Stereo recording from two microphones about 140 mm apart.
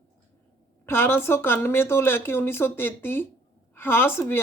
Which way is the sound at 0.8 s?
15° left (ahead or behind).